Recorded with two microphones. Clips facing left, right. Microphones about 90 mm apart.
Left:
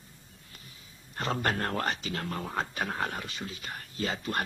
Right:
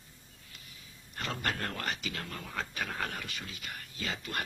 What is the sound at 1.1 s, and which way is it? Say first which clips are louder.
Speech: left 6 dB; 35° left (ahead or behind).